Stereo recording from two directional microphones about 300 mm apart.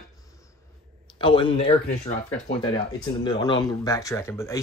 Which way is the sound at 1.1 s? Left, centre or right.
Centre.